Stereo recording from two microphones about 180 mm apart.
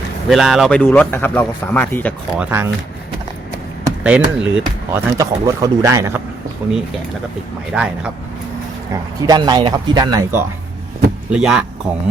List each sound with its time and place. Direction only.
0.3 s speech: centre (ahead or behind)
2.4 s speech: 10° right (ahead or behind)
4.0 s speech: 5° right (ahead or behind)
5.1 s speech: 20° right (ahead or behind)
7.7 s speech: 5° right (ahead or behind)
8.9 s speech: 20° right (ahead or behind)
11.3 s speech: 5° right (ahead or behind)